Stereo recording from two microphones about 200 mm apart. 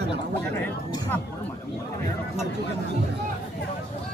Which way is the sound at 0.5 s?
10° left (ahead or behind).